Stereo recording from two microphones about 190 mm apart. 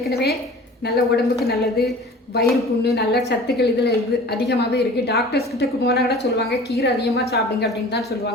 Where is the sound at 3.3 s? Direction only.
60° left (ahead or behind).